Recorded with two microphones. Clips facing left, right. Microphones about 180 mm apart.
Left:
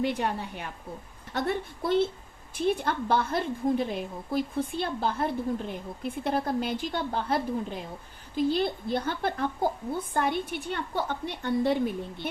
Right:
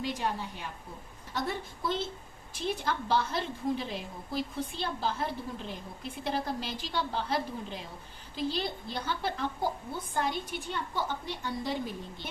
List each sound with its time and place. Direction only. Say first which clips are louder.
0.0 s a woman's voice: left 5 dB; 60° left (ahead or behind)